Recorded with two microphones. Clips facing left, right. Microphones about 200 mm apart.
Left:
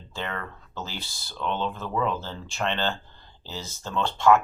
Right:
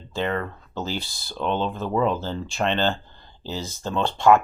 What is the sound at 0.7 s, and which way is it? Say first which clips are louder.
Speech: right 8 dB; 15° right (ahead or behind).